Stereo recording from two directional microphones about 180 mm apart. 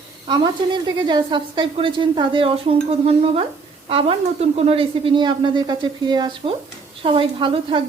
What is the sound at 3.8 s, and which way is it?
A woman's voice, 35° right (ahead or behind).